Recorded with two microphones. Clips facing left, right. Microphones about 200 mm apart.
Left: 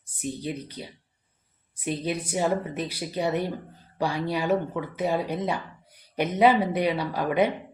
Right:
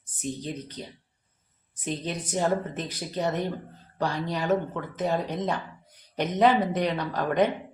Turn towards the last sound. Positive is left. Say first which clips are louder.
# even
turn(degrees=10)  # may be behind; listen again after turning